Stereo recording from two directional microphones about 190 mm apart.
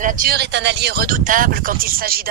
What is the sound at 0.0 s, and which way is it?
Speech, 45° right (ahead or behind).